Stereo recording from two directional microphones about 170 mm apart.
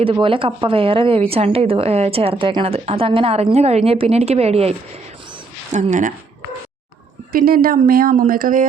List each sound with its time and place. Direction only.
0.0 s speech: 30° right (ahead or behind)
5.7 s speech: 50° right (ahead or behind)
7.3 s speech: 60° right (ahead or behind)